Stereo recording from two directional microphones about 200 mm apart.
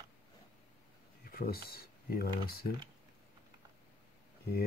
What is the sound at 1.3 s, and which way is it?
Speech, 50° left (ahead or behind).